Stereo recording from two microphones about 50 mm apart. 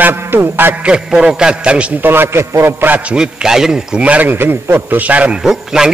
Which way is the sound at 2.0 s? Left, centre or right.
Right.